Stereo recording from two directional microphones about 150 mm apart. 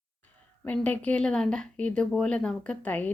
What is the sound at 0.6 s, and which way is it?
A woman's voice, 10° left (ahead or behind).